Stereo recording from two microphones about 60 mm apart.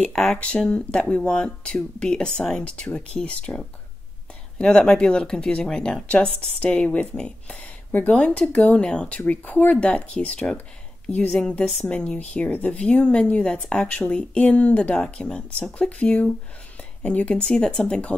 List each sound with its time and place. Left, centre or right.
0.0 s a woman's voice: centre
9.2 s a woman's voice: left
16.0 s a woman's voice: left